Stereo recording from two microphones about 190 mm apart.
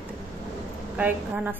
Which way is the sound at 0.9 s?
10° right (ahead or behind).